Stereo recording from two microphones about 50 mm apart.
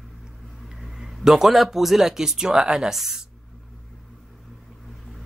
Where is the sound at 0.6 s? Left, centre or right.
Centre.